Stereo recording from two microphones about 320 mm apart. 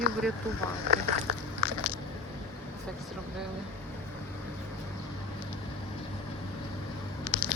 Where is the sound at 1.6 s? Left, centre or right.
Right.